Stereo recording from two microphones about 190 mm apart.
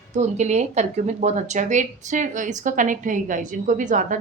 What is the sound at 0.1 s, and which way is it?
A woman's voice, 40° right (ahead or behind).